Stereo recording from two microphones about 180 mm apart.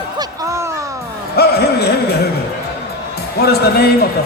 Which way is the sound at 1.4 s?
60° left (ahead or behind).